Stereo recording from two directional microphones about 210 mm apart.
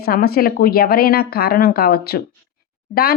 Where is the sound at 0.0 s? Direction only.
45° left (ahead or behind).